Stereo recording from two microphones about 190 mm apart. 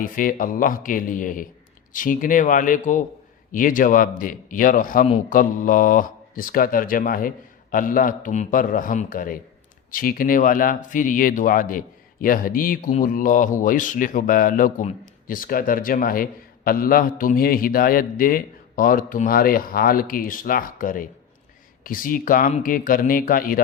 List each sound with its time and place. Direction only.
0.0 s speech: 45° left (ahead or behind)